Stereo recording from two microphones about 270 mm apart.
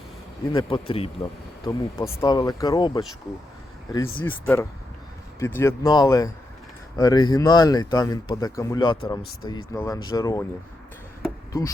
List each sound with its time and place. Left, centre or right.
0.5 s speech: centre